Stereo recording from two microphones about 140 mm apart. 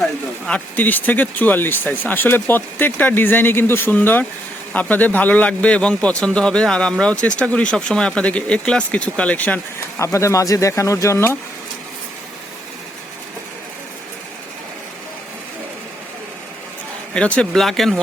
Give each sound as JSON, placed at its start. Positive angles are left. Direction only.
{"t": 0.0, "sound": "a man's voice", "side_deg": 5}
{"t": 10.0, "sound": "speech", "side_deg": 20}
{"t": 17.2, "sound": "speech", "side_deg": 5}